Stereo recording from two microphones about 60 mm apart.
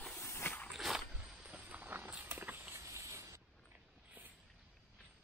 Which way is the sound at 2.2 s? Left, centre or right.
Right.